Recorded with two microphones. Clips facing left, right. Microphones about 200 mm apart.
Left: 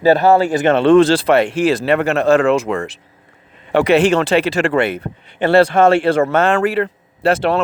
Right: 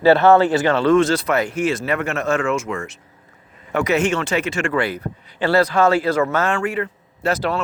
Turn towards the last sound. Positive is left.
turn(degrees=30)  # may be behind; listen again after turning